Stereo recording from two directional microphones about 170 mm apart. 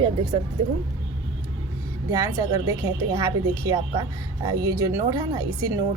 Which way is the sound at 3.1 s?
15° right (ahead or behind).